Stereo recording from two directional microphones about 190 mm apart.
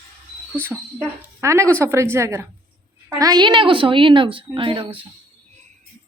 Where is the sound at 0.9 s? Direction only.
15° right (ahead or behind).